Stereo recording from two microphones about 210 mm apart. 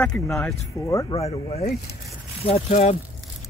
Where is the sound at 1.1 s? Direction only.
30° left (ahead or behind).